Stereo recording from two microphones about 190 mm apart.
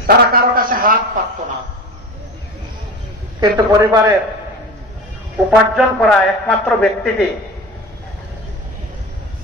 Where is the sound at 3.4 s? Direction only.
20° right (ahead or behind).